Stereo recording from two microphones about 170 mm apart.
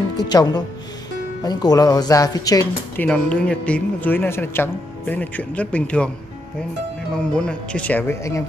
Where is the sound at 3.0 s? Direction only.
5° left (ahead or behind).